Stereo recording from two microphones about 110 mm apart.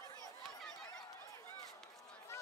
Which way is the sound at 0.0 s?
30° left (ahead or behind).